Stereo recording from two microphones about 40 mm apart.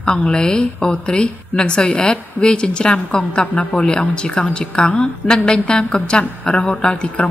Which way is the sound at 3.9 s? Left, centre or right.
Left.